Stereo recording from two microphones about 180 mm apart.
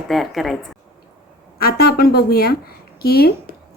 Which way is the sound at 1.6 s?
60° left (ahead or behind).